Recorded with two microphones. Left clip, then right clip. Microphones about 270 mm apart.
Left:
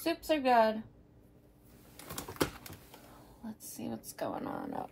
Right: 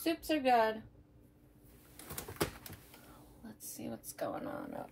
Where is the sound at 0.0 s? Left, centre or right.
Centre.